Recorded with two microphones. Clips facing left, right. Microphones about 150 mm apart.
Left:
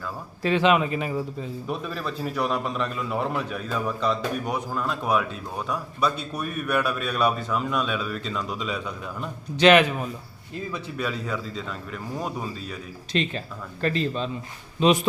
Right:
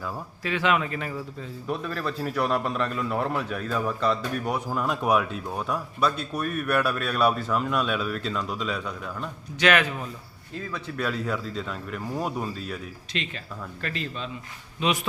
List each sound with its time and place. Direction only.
0.4 s speech: 25° left (ahead or behind)
1.6 s a man's voice: 5° left (ahead or behind)
9.6 s speech: 20° left (ahead or behind)
10.7 s a man's voice: 5° left (ahead or behind)
13.1 s a man's voice: 35° left (ahead or behind)